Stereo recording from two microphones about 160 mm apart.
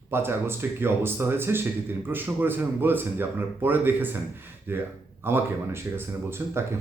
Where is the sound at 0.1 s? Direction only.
15° right (ahead or behind).